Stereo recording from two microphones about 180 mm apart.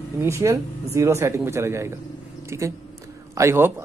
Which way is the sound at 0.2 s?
15° right (ahead or behind).